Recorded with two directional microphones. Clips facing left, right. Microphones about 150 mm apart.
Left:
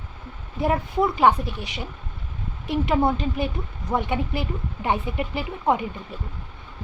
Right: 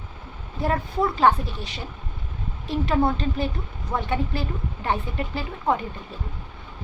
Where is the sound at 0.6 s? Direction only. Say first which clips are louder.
Left 2 dB; 20° left (ahead or behind).